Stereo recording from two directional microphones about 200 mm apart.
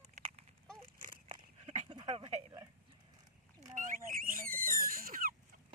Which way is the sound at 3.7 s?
40° right (ahead or behind).